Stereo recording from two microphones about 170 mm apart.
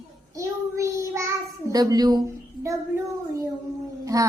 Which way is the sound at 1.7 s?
20° right (ahead or behind).